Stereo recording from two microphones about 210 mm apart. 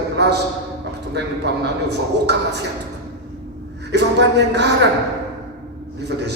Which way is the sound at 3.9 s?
55° right (ahead or behind).